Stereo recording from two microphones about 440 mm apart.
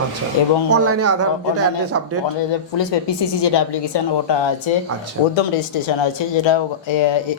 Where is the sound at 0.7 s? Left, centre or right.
Right.